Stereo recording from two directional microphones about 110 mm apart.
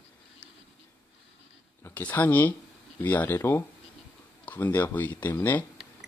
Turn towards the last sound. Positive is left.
turn(degrees=15)  # may be behind; listen again after turning